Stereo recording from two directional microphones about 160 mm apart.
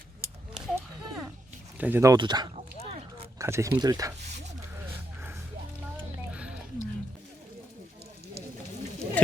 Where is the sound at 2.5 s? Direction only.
45° right (ahead or behind).